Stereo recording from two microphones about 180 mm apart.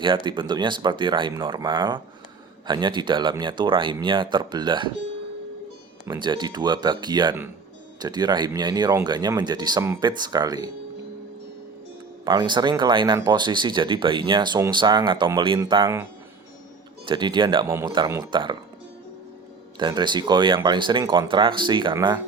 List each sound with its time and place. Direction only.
0.0 s speech: 25° right (ahead or behind)
6.1 s speech: 25° right (ahead or behind)
12.2 s speech: 25° right (ahead or behind)
17.1 s speech: 25° right (ahead or behind)
19.7 s speech: 25° right (ahead or behind)